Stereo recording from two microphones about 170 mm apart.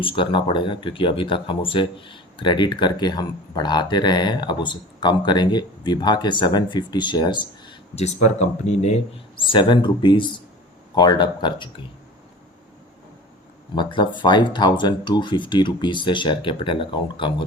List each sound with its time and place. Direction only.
0.0 s speech: 30° left (ahead or behind)
7.9 s speech: 40° left (ahead or behind)
9.5 s speech: 30° left (ahead or behind)
13.7 s speech: 25° left (ahead or behind)